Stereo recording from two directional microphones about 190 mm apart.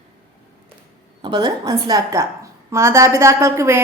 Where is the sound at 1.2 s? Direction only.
25° right (ahead or behind).